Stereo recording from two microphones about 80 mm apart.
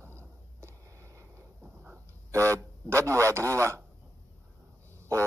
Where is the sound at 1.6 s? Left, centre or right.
Centre.